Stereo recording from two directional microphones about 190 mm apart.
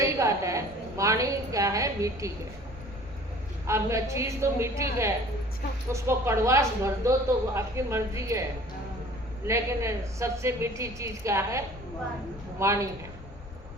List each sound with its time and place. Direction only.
0.0 s a woman's voice: 15° right (ahead or behind)
3.7 s speech: 15° right (ahead or behind)
9.5 s speech: 15° right (ahead or behind)